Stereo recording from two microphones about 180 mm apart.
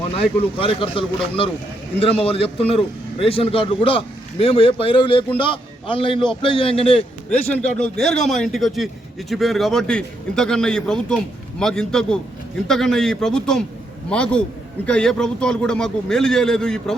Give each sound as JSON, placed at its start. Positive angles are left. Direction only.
{"t": 0.6, "sound": "a man's voice", "side_deg": 30}
{"t": 7.5, "sound": "a man's voice", "side_deg": 5}